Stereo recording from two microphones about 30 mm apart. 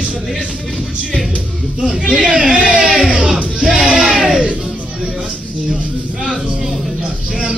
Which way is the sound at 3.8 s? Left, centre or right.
Centre.